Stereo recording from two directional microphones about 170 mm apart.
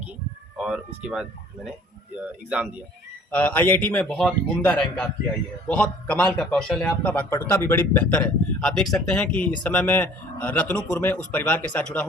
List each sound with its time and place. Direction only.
0.5 s speech: 5° right (ahead or behind)
3.3 s a man's voice: 10° left (ahead or behind)